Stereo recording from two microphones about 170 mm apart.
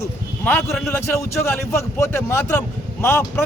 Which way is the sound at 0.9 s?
15° left (ahead or behind).